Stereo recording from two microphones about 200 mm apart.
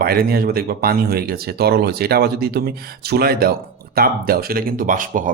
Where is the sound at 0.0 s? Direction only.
50° right (ahead or behind).